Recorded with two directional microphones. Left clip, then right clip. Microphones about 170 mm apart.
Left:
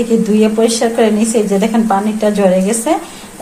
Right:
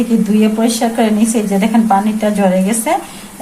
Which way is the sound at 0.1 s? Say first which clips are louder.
Left 2 dB; 30° left (ahead or behind).